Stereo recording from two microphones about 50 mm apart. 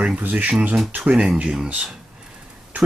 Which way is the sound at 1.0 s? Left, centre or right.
Centre.